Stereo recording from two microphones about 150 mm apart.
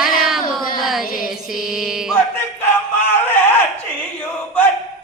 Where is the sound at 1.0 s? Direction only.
70° left (ahead or behind).